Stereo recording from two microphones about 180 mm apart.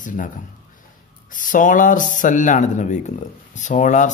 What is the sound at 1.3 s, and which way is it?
Speech, 45° left (ahead or behind).